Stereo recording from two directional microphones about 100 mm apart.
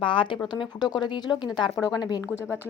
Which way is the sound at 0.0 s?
60° left (ahead or behind).